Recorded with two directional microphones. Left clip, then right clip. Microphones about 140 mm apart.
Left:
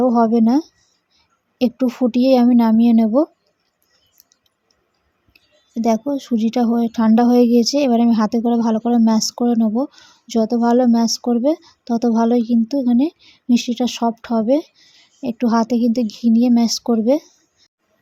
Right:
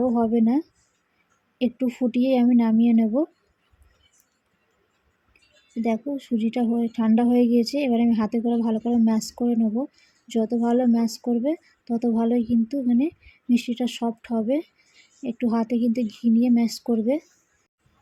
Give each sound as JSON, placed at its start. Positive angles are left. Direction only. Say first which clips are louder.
{"t": 0.0, "sound": "speech", "louder": "left 7 dB", "side_deg": 35}
{"t": 5.8, "sound": "speech", "louder": "left 8 dB", "side_deg": 35}